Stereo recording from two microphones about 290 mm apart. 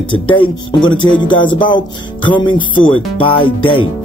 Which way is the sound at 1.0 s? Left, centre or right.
Centre.